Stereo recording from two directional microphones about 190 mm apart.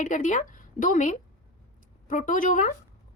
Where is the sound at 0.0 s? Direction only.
40° left (ahead or behind).